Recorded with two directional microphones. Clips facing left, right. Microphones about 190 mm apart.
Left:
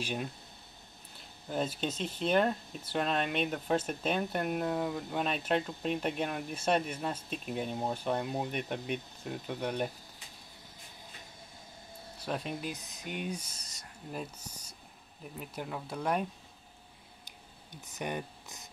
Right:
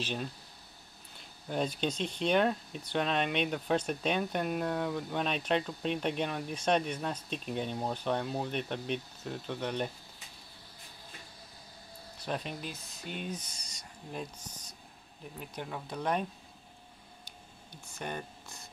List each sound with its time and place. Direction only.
0.0 s speech: 10° left (ahead or behind)
1.5 s speech: 5° left (ahead or behind)
12.3 s speech: 5° left (ahead or behind)
12.7 s speech: 15° left (ahead or behind)
17.2 s a sound: 20° left (ahead or behind)